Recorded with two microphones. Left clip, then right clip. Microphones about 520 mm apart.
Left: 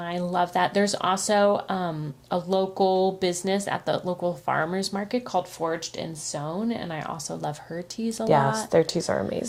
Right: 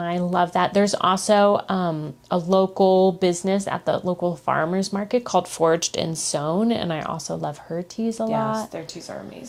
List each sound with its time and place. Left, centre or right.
0.0 s speech: right
8.7 s a woman's voice: left